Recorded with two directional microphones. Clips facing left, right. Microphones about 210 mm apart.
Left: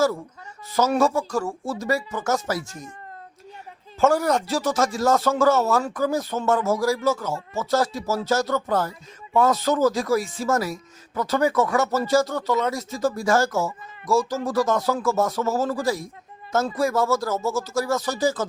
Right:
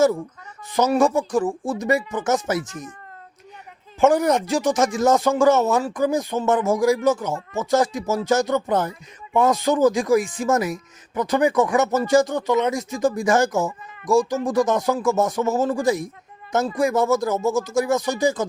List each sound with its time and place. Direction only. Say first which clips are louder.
0.8 s speech: right 2 dB; 15° right (ahead or behind)
4.0 s speech: right 3 dB; 20° right (ahead or behind)